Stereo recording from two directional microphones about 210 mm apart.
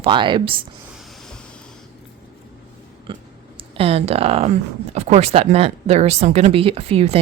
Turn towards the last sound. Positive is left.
turn(degrees=-30)  # may be behind; listen again after turning